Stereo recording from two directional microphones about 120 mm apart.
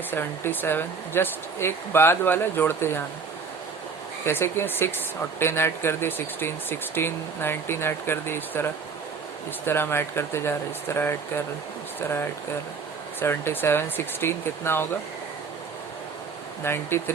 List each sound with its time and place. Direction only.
0.1 s speech: 15° left (ahead or behind)
4.3 s speech: 20° left (ahead or behind)
16.6 s speech: 20° left (ahead or behind)